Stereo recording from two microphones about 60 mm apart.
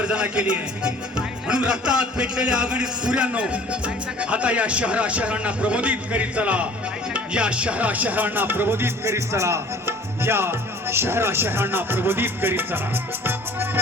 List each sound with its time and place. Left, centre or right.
0.0 s a man's voice: centre; by 9.1 s right
9.1 s music: right